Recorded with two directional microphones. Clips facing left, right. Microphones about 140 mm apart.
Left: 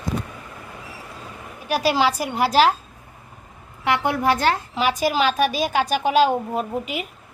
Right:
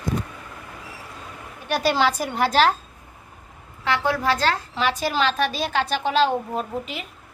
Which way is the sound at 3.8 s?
20° left (ahead or behind).